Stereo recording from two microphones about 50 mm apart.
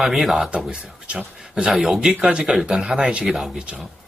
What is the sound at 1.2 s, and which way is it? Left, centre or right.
Speech, centre.